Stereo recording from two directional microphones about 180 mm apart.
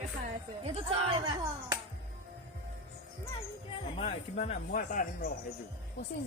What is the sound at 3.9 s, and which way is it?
Speech, 35° left (ahead or behind).